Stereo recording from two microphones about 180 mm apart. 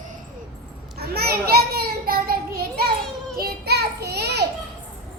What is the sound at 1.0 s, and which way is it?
Children playing, 60° right (ahead or behind).